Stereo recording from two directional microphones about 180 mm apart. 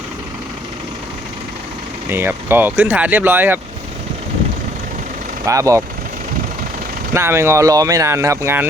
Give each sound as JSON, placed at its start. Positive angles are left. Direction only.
{"t": 2.0, "sound": "speech", "side_deg": -10}
{"t": 5.5, "sound": "speech", "side_deg": -20}
{"t": 7.1, "sound": "speech", "side_deg": -15}